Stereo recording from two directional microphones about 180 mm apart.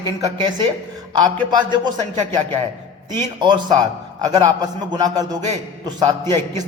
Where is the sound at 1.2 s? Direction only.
25° right (ahead or behind).